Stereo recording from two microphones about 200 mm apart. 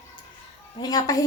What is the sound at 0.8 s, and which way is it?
Speech, 20° left (ahead or behind).